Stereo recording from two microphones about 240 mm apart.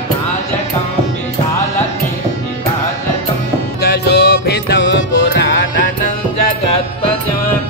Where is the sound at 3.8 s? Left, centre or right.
Left.